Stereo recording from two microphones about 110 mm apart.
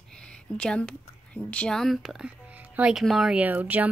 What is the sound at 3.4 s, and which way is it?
Speech, 15° right (ahead or behind).